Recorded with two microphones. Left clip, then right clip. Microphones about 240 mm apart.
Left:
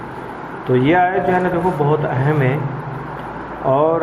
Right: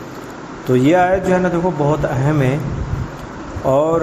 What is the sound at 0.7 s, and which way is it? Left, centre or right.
Speech, right.